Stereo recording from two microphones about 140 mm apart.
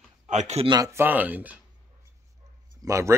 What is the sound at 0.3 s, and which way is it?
Speech, 55° right (ahead or behind).